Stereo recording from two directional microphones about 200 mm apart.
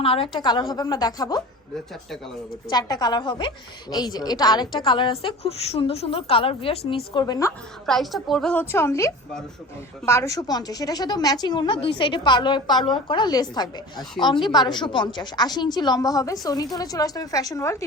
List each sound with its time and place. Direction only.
0.0 s a woman's voice: 30° left (ahead or behind)
2.6 s a woman's voice: 20° left (ahead or behind)
7.9 s a woman's voice: centre (ahead or behind)